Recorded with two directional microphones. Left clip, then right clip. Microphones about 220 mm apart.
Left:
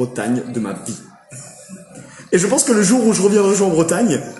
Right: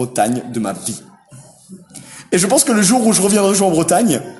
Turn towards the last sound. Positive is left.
turn(degrees=-45)  # may be behind; listen again after turning